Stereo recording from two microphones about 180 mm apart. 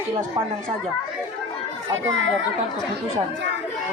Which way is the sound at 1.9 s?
90° right.